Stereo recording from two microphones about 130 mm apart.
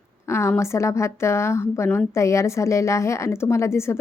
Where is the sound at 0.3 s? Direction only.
20° left (ahead or behind).